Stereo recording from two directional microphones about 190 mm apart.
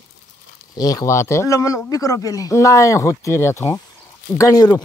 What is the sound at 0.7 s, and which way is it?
Speech, 20° left (ahead or behind).